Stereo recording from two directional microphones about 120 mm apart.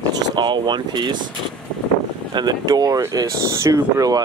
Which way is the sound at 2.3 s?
35° right (ahead or behind).